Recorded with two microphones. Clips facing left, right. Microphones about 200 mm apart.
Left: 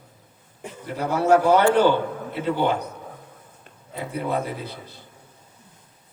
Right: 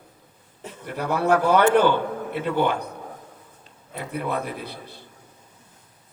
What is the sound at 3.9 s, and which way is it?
A man's voice, 60° right (ahead or behind).